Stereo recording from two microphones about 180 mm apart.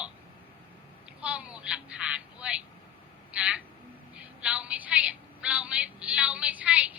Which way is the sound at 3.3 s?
5° right (ahead or behind).